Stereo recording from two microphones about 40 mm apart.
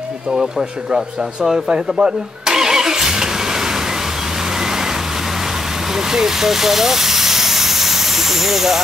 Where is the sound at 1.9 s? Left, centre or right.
Centre.